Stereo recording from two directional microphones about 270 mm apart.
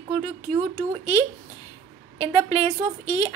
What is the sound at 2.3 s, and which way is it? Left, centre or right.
Speech, centre.